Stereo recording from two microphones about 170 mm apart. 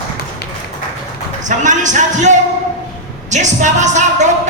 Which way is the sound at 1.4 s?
45° right (ahead or behind).